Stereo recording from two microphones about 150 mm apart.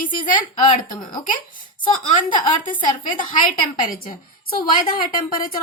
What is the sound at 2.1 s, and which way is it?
Speech, 65° left (ahead or behind).